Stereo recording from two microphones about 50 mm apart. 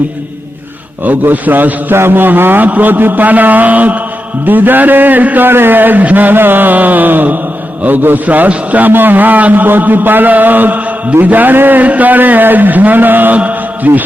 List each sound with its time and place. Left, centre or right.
1.0 s a man's voice: right
5.5 s a man's voice: right